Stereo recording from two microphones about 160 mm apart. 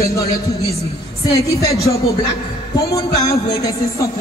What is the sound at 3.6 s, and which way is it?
Speech, 20° left (ahead or behind).